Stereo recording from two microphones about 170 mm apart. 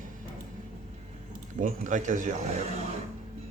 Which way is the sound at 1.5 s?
50° right (ahead or behind).